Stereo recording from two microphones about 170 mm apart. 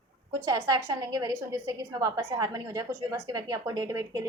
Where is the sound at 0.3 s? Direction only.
20° right (ahead or behind).